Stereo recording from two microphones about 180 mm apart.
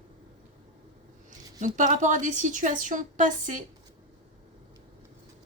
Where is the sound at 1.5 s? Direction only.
45° right (ahead or behind).